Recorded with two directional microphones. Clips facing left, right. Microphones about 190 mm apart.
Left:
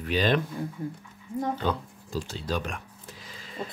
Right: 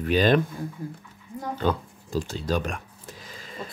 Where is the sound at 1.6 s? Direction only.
45° right (ahead or behind).